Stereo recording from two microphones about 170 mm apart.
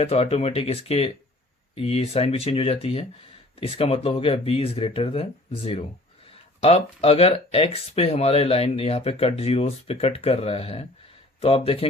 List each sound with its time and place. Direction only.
0.0 s speech: 35° left (ahead or behind)